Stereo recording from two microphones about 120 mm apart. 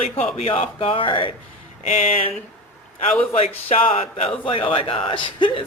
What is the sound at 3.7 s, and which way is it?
Speech, 55° left (ahead or behind).